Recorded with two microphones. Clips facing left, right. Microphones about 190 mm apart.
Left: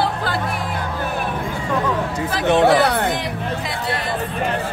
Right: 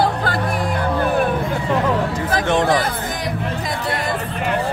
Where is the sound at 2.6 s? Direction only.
75° left (ahead or behind).